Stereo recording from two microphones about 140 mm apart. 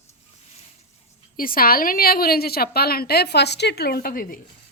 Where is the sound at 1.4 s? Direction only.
90° left.